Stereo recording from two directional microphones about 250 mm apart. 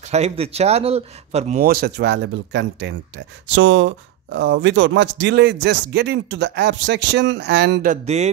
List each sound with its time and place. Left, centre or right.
0.1 s speech: right